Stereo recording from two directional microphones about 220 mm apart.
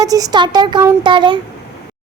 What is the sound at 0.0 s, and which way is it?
Speech, 15° right (ahead or behind).